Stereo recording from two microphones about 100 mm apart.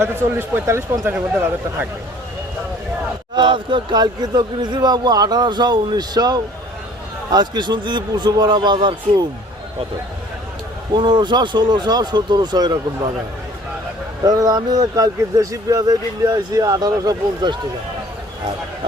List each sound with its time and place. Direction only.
0.0 s speech: 25° right (ahead or behind)
3.3 s speech: 55° right (ahead or behind)
10.9 s speech: 50° right (ahead or behind)
14.3 s speech: 40° right (ahead or behind)